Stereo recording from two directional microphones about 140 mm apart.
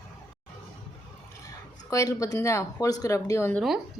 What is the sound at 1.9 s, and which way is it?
Speech, 25° left (ahead or behind).